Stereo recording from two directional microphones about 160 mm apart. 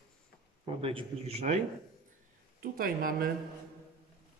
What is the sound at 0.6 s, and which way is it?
Speech, 35° right (ahead or behind).